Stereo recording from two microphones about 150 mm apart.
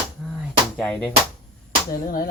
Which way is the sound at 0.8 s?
10° left (ahead or behind).